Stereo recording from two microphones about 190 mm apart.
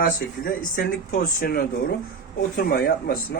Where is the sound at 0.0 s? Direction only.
50° left (ahead or behind).